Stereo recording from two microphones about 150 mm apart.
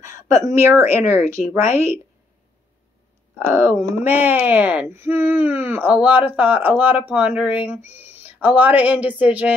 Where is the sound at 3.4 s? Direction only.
15° right (ahead or behind).